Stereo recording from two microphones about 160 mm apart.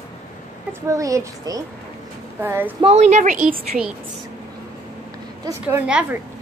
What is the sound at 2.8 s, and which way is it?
Speech, 40° right (ahead or behind).